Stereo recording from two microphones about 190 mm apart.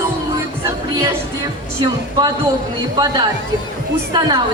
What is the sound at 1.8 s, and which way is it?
Speech, 20° right (ahead or behind).